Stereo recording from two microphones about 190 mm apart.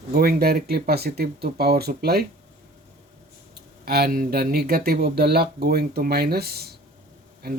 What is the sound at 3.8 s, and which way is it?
Speech, 55° right (ahead or behind).